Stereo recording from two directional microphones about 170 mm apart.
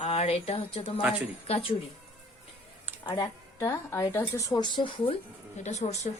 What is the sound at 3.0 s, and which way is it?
Speech, 25° left (ahead or behind).